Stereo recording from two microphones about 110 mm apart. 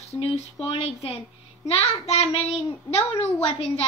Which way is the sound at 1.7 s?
65° left (ahead or behind).